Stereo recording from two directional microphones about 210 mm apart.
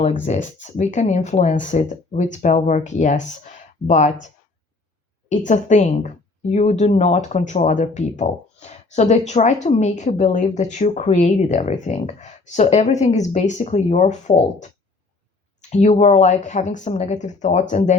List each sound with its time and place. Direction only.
0.3 s a woman's voice: 35° left (ahead or behind)
5.5 s a woman's voice: 35° left (ahead or behind)
15.7 s a woman's voice: 35° left (ahead or behind)